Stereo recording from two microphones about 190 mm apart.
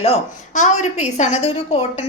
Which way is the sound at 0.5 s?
40° left (ahead or behind).